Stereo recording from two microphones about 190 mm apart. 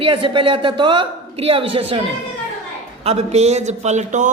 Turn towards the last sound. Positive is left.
turn(degrees=-40)  # may be behind; listen again after turning